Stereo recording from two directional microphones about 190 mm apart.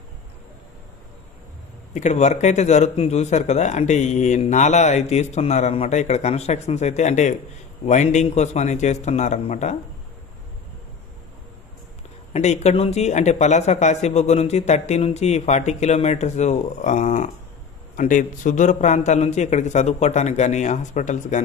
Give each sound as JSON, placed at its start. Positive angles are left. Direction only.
{"t": 2.0, "sound": "speech", "side_deg": 40}
{"t": 12.3, "sound": "speech", "side_deg": 35}